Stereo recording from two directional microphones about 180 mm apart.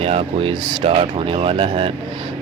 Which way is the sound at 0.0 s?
35° right (ahead or behind).